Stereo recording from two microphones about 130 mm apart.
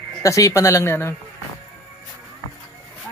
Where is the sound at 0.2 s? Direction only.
25° left (ahead or behind).